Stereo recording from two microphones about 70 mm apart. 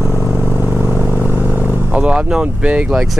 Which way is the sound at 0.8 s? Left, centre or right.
Centre.